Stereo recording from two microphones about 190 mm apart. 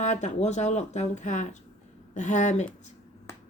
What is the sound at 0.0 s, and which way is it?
Speech, 40° left (ahead or behind).